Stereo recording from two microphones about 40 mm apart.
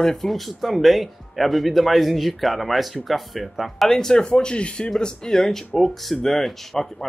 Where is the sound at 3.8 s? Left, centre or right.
Centre.